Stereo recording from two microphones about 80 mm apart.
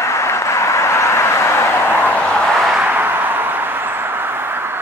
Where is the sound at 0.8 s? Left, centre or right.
Left.